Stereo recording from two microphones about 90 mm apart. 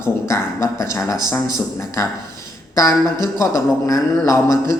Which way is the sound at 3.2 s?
35° left (ahead or behind).